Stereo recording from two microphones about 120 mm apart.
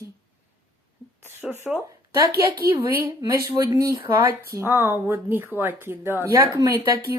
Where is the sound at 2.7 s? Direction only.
15° right (ahead or behind).